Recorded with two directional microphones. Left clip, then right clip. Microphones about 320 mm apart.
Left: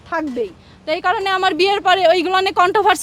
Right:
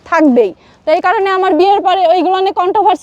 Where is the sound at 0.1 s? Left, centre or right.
Right.